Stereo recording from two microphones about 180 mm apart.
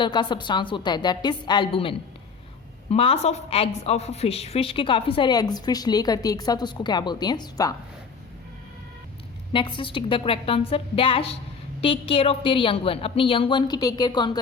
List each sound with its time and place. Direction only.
0.0 s a woman's voice: 25° left (ahead or behind)
9.5 s a woman's voice: 30° left (ahead or behind)